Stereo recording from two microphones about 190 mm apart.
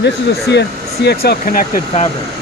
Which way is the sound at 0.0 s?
65° left (ahead or behind).